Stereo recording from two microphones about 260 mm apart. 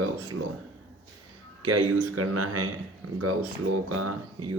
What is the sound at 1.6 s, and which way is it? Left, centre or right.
Speech, right.